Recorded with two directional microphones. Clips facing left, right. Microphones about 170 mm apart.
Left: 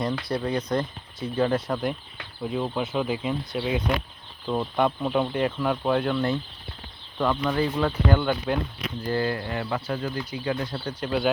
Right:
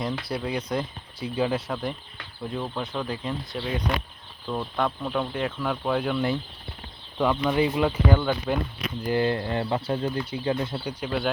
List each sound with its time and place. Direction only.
0.0 s speech: 5° right (ahead or behind)
9.0 s speech: 20° right (ahead or behind)
11.0 s speech: centre (ahead or behind)